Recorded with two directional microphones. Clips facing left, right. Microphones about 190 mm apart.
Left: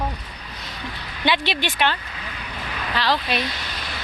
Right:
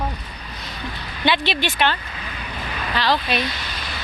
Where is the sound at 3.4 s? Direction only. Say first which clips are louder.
Right 1 dB; 45° left (ahead or behind).